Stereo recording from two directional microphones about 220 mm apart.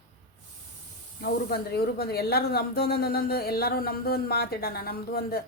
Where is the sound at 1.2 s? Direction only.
45° left (ahead or behind).